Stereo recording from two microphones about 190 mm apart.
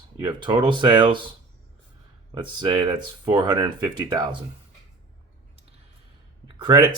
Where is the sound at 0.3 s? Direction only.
25° right (ahead or behind).